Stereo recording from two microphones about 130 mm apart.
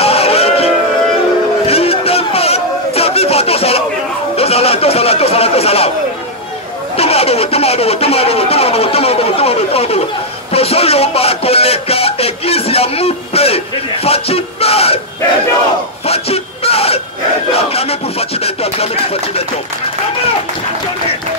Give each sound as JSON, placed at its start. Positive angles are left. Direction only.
{"t": 0.0, "sound": "music", "side_deg": 50}
{"t": 1.7, "sound": "chatter", "side_deg": 50}
{"t": 4.4, "sound": "a sound", "side_deg": 50}
{"t": 7.0, "sound": "speech", "side_deg": 50}
{"t": 16.1, "sound": "a sound", "side_deg": 50}
{"t": 17.6, "sound": "speech", "side_deg": 50}